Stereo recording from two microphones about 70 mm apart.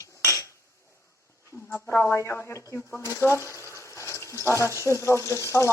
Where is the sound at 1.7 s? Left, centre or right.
Left.